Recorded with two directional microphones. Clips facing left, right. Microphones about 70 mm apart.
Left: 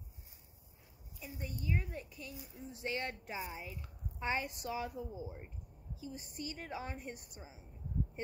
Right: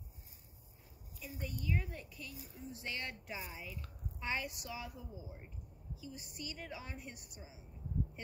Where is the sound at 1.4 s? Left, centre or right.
Left.